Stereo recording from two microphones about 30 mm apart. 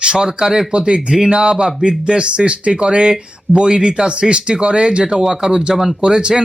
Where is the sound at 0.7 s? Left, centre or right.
Right.